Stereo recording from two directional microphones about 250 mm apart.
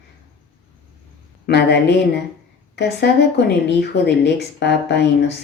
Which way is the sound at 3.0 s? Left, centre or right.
Left.